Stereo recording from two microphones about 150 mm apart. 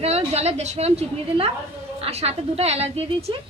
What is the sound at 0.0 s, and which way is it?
A woman's voice, 45° right (ahead or behind).